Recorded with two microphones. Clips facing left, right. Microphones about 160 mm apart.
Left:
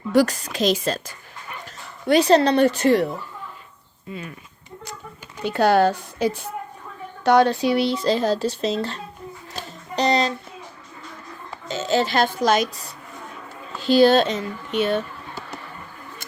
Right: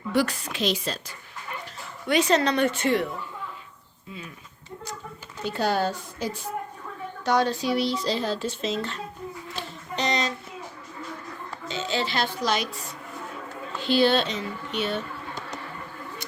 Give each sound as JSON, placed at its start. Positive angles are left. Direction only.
{"t": 0.1, "sound": "a woman's voice", "side_deg": 40}
{"t": 5.5, "sound": "a woman's voice", "side_deg": 65}
{"t": 9.5, "sound": "music", "side_deg": 35}
{"t": 11.7, "sound": "speech", "side_deg": 45}